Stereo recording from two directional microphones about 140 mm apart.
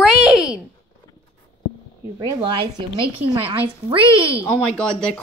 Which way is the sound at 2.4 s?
35° right (ahead or behind).